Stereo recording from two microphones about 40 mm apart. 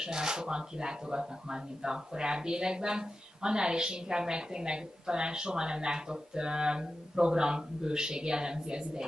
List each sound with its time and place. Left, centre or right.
0.0 s speech: centre